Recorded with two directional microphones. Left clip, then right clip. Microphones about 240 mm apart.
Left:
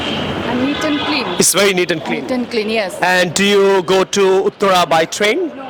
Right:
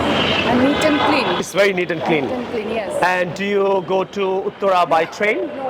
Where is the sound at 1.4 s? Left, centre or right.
Left.